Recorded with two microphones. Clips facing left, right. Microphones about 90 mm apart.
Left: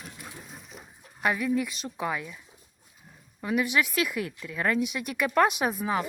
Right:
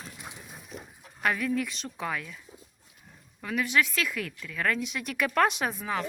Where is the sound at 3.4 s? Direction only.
10° left (ahead or behind).